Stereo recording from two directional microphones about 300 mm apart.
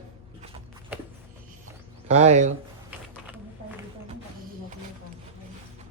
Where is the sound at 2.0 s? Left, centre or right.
Right.